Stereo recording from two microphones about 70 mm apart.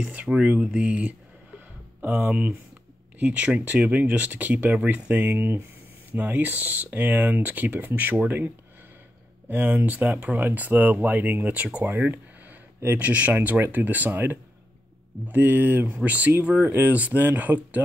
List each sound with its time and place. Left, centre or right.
0.1 s speech: centre
9.5 s speech: right